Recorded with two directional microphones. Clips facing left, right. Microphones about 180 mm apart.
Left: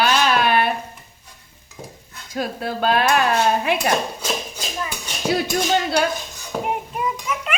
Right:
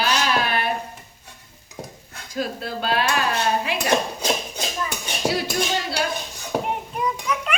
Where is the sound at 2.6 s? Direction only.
50° left (ahead or behind).